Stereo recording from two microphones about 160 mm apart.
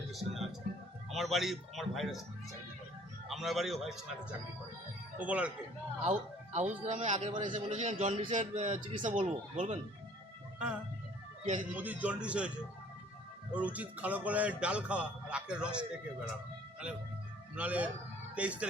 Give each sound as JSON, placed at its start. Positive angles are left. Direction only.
{"t": 0.1, "sound": "speech", "side_deg": 0}
{"t": 3.2, "sound": "speech", "side_deg": 0}
{"t": 6.0, "sound": "a man's voice", "side_deg": -45}
{"t": 7.5, "sound": "a man's voice", "side_deg": -45}
{"t": 11.4, "sound": "a man's voice", "side_deg": -50}
{"t": 11.7, "sound": "speech", "side_deg": -10}
{"t": 13.5, "sound": "speech", "side_deg": -10}
{"t": 17.5, "sound": "speech", "side_deg": -10}